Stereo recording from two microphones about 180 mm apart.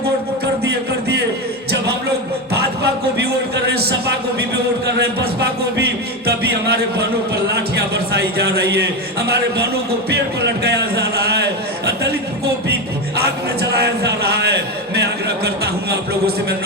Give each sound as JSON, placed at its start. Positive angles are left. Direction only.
{"t": 0.6, "sound": "music", "side_deg": -65}
{"t": 3.2, "sound": "a sound", "side_deg": -65}
{"t": 6.2, "sound": "music", "side_deg": -60}
{"t": 7.9, "sound": "a man's voice", "side_deg": -65}
{"t": 10.1, "sound": "a man's voice", "side_deg": -65}
{"t": 13.6, "sound": "a man's voice", "side_deg": -65}